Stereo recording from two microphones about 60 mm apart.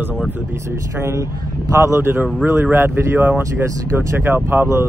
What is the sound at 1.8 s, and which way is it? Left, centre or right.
Speech, right.